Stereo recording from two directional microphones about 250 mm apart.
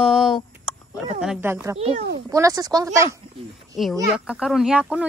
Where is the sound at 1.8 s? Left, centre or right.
Right.